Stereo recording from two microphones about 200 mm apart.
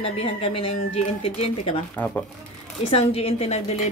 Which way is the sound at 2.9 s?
30° left (ahead or behind).